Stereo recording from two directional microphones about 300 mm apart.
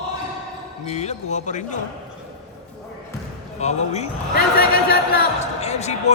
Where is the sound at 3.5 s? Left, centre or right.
Left.